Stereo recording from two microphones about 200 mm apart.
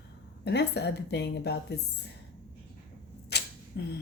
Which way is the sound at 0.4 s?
55° left (ahead or behind).